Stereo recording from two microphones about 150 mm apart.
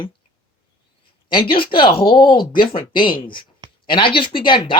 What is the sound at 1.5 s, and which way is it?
Speech, 35° left (ahead or behind).